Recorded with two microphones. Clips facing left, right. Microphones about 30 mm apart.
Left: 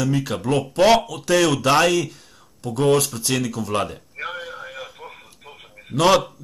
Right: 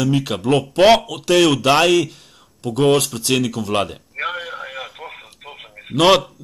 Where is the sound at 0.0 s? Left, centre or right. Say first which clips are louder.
Right 3 dB; right.